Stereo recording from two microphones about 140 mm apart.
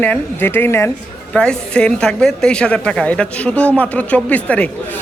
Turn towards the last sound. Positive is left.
turn(degrees=10)  # may be behind; listen again after turning